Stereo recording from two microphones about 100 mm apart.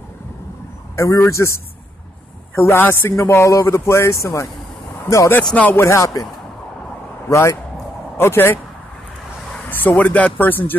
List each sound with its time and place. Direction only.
0.9 s a man's voice: 30° left (ahead or behind)
5.4 s speech: 10° left (ahead or behind)
5.8 s speech: 30° left (ahead or behind)
7.2 s a man's voice: 30° left (ahead or behind)
9.7 s speech: 20° left (ahead or behind)